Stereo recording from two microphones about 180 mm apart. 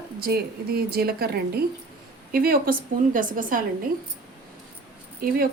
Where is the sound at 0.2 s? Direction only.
55° right (ahead or behind).